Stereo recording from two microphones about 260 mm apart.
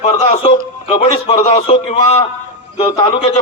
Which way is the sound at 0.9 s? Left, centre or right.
Left.